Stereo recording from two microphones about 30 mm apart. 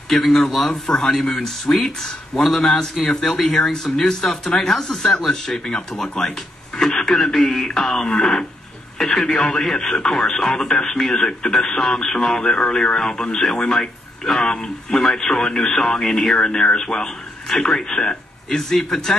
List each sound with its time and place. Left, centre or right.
0.1 s speech: centre
6.9 s radio: left
7.3 s speech: centre
14.9 s speech: centre
16.3 s speech: left
18.6 s speech: centre